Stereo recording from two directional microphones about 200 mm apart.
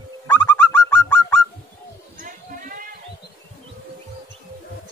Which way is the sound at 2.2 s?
40° right (ahead or behind).